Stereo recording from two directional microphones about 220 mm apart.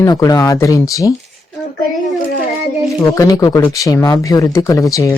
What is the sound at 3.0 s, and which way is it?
Speech, 15° left (ahead or behind).